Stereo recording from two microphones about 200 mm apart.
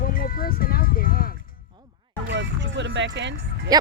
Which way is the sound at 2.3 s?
60° right (ahead or behind).